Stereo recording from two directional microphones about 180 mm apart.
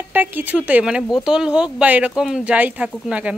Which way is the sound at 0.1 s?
10° right (ahead or behind).